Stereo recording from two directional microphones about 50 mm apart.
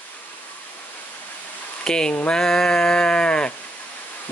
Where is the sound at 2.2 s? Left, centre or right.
Centre.